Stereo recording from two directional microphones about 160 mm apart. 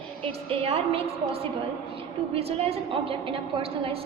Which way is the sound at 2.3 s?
40° right (ahead or behind).